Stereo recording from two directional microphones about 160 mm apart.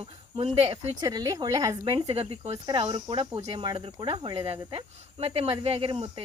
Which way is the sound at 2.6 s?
25° right (ahead or behind).